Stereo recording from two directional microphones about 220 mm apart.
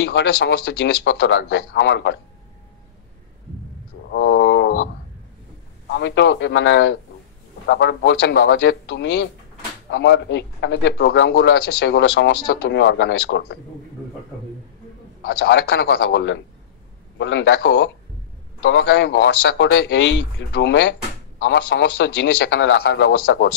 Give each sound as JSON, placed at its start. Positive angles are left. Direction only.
{"t": 0.0, "sound": "a man's voice", "side_deg": 50}
{"t": 4.1, "sound": "wild animals", "side_deg": 50}
{"t": 5.9, "sound": "a man's voice", "side_deg": 55}
{"t": 15.2, "sound": "a man's voice", "side_deg": 50}